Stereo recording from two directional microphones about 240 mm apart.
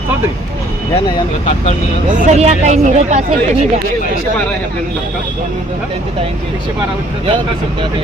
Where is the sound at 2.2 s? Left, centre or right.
Right.